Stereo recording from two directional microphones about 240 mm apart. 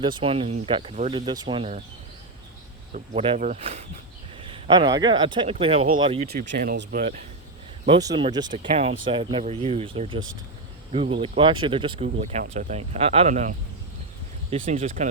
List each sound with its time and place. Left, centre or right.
0.0 s speech: right
2.9 s speech: right
6.2 s speech: right
8.0 s speech: centre